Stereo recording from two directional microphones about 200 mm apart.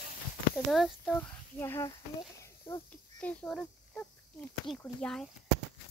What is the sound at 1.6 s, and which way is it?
Speech, 15° left (ahead or behind).